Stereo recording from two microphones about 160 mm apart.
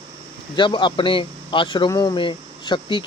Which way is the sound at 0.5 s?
30° left (ahead or behind).